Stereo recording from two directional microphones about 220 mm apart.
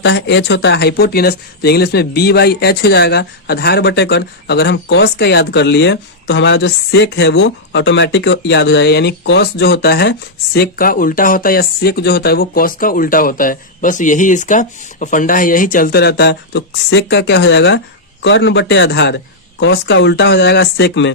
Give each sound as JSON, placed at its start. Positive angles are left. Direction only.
{"t": 0.0, "sound": "speech", "side_deg": 55}